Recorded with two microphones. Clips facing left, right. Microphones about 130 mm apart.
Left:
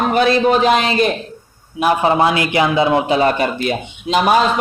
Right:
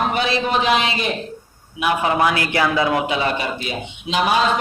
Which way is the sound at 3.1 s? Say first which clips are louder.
Left 7 dB; 45° left (ahead or behind).